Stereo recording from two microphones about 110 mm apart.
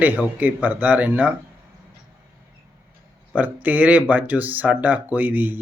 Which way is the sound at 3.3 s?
15° right (ahead or behind).